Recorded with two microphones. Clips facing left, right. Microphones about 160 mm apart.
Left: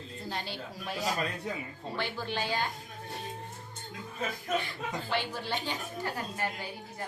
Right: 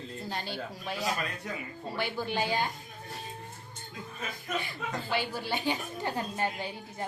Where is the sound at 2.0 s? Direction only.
10° right (ahead or behind).